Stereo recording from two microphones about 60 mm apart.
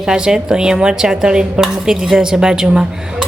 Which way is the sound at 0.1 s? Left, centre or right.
Centre.